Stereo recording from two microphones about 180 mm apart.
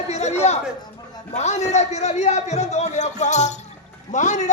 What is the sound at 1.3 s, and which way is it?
A man's voice, 40° left (ahead or behind).